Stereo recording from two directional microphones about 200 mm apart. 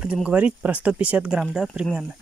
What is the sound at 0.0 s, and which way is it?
Speech, 5° right (ahead or behind).